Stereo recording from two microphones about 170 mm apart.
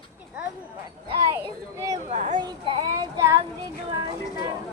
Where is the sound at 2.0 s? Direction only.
50° right (ahead or behind).